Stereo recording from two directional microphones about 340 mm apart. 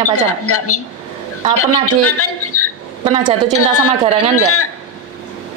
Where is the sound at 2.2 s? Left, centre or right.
Left.